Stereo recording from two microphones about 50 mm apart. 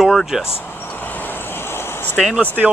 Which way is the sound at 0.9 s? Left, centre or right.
Left.